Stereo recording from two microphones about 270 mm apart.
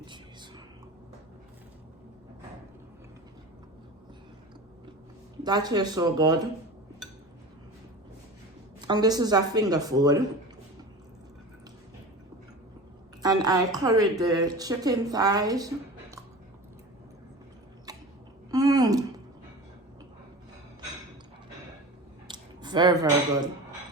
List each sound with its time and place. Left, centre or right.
0.0 s whispering: centre
5.4 s a woman's voice: centre
8.9 s a woman's voice: centre
13.2 s a woman's voice: centre
17.9 s a sound: centre
22.3 s a sound: centre